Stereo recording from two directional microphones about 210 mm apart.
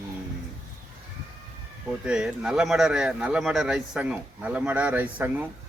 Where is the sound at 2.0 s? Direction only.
5° right (ahead or behind).